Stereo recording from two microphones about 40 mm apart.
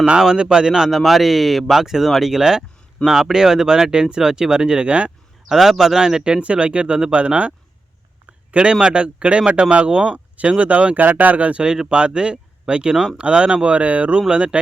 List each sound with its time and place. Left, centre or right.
0.2 s speech: centre
0.9 s speech: centre
2.3 s speech: centre
5.5 s speech: centre
6.0 s speech: centre
8.7 s speech: right
10.7 s speech: right
11.9 s speech: right